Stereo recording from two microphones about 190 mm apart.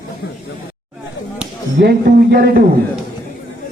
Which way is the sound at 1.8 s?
55° right (ahead or behind).